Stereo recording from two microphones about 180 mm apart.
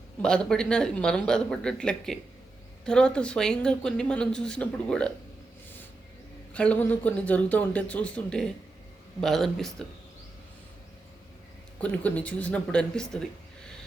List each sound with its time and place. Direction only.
0.2 s speech: 5° left (ahead or behind)
6.5 s speech: 5° left (ahead or behind)
11.8 s speech: 10° left (ahead or behind)